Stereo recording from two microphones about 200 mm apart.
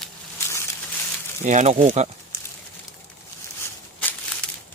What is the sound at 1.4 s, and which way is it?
Speech, 35° right (ahead or behind).